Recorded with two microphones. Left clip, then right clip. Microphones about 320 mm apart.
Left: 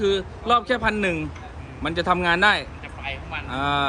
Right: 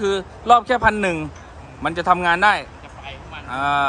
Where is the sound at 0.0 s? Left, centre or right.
Centre.